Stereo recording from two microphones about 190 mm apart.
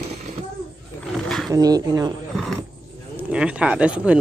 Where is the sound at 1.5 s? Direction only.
20° right (ahead or behind).